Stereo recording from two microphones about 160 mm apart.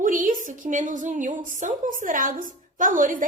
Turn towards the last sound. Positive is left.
turn(degrees=-60)  # may be behind; listen again after turning